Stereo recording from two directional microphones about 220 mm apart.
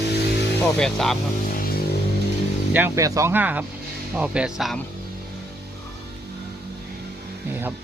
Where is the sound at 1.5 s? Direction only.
40° left (ahead or behind).